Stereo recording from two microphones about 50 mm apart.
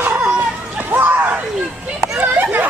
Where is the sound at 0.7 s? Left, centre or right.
Right.